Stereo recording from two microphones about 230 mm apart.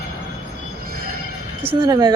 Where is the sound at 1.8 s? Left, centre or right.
Centre.